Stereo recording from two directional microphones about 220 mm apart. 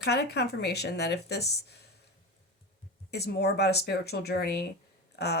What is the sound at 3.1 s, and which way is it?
Speech, 50° left (ahead or behind).